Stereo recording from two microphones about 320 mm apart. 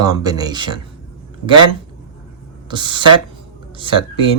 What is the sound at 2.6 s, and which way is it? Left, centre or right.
Speech, centre.